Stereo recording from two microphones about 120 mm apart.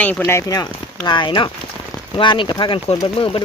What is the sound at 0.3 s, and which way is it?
Speech, 25° left (ahead or behind).